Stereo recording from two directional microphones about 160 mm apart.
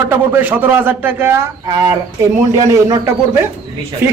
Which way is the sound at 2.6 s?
20° right (ahead or behind).